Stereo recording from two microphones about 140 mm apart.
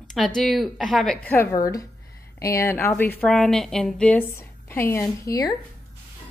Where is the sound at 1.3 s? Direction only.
20° left (ahead or behind).